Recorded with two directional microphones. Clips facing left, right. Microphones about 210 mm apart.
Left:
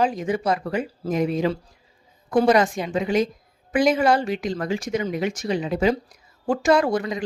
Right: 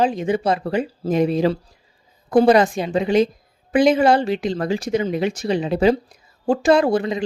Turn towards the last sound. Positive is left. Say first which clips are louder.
# right 3 dB
turn(degrees=-30)  # may be behind; listen again after turning